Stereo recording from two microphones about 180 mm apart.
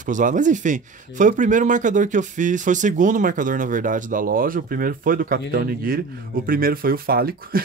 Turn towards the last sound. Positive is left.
turn(degrees=-55)  # may be behind; listen again after turning